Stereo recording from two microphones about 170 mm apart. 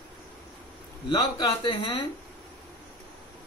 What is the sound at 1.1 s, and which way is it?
Speech, 25° left (ahead or behind).